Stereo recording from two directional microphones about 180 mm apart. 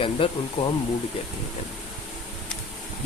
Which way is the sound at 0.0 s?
30° left (ahead or behind).